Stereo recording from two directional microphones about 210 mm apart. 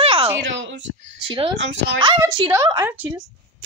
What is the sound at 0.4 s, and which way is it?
Speech, 60° right (ahead or behind).